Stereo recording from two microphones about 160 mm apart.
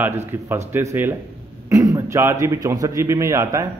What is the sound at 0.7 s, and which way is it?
A man's voice, 10° right (ahead or behind).